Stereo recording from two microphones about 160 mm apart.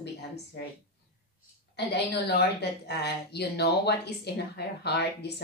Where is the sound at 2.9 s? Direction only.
90° left.